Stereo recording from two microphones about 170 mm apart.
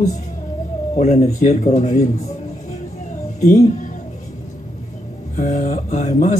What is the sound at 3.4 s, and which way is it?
Speech, 45° left (ahead or behind).